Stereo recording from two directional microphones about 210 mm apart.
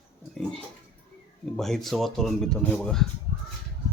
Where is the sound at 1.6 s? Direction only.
Centre (ahead or behind).